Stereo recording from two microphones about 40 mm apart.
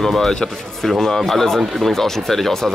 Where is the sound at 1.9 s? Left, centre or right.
Centre.